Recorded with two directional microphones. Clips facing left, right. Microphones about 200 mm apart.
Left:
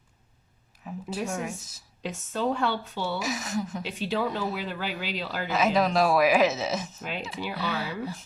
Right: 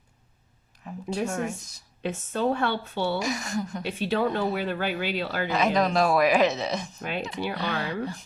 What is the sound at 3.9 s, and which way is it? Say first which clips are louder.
Speech: right 6 dB; 55° right (ahead or behind).